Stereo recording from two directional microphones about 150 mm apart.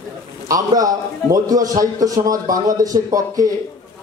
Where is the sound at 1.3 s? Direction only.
25° right (ahead or behind).